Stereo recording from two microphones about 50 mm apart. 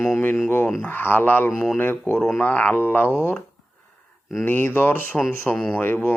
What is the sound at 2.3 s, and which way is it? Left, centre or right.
Speech, left.